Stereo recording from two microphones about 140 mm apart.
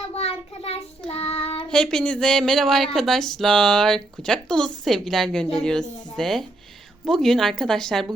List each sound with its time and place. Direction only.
0.1 s child singing: 45° left (ahead or behind)
1.7 s speech: 5° left (ahead or behind)